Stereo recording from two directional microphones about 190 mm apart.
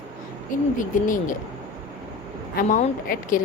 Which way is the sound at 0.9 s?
45° left (ahead or behind).